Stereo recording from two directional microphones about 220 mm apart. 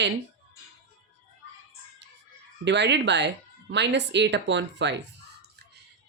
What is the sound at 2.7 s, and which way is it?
Speech, 50° right (ahead or behind).